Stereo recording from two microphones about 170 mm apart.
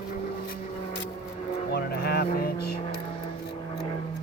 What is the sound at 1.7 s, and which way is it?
Vehicle, 70° left (ahead or behind).